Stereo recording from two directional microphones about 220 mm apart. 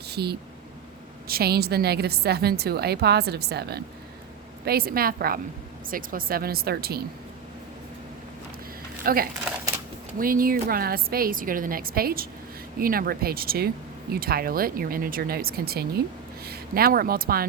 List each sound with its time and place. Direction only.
0.1 s a woman's voice: 45° right (ahead or behind)
9.0 s a woman's voice: 40° right (ahead or behind)